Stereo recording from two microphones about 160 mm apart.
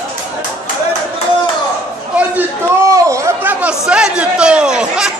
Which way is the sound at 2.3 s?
20° right (ahead or behind).